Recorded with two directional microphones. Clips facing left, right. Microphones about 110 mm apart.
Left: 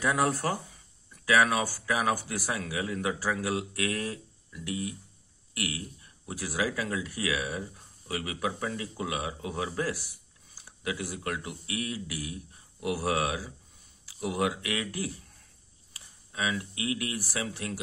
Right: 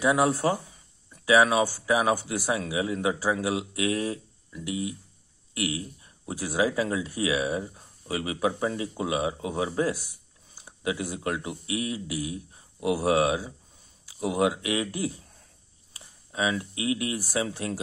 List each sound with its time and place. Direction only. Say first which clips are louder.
0.0 s speech: right 4 dB; 20° right (ahead or behind)